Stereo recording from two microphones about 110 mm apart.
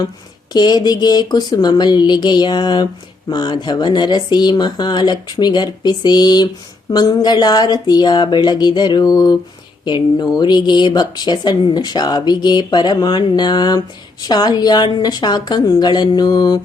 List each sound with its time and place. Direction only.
0.5 s speech: 40° left (ahead or behind)